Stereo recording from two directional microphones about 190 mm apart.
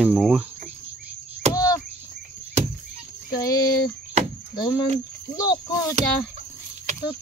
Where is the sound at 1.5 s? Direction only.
15° left (ahead or behind).